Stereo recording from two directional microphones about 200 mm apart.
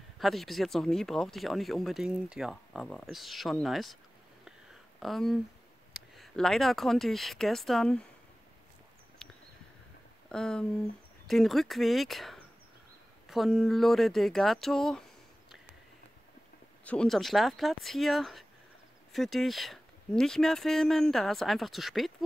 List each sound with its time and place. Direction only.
0.2 s speech: centre (ahead or behind)
5.0 s speech: centre (ahead or behind)
9.2 s a sound: 5° left (ahead or behind)
10.3 s speech: 5° left (ahead or behind)
16.8 s speech: 5° left (ahead or behind)